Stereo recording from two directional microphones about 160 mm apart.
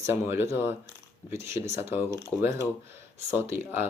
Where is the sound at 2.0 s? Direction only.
15° left (ahead or behind).